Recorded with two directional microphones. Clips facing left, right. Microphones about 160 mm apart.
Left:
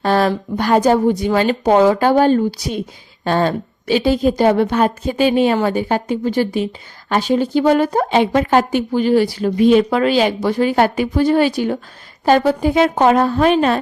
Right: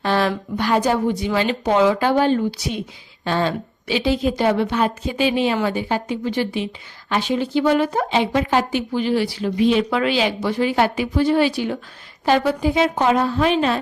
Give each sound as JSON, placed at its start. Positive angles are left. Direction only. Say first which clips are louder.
{"t": 0.0, "sound": "speech", "louder": "left 4 dB", "side_deg": 40}